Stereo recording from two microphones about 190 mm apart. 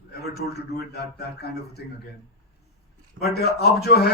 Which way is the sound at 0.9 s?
55° left (ahead or behind).